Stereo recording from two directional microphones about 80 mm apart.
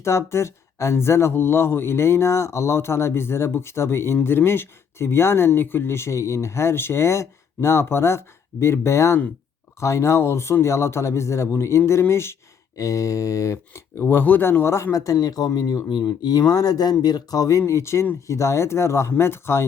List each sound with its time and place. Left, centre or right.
0.0 s speech: left
12.7 s speech: left
14.9 s speech: left
17.6 s speech: left